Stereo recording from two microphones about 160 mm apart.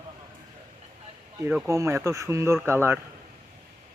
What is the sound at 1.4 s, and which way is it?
A man's voice, 10° right (ahead or behind).